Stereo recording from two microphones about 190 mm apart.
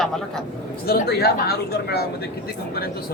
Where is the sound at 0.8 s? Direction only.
55° left (ahead or behind).